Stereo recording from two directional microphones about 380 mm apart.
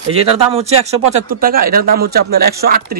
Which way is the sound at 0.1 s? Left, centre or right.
Centre.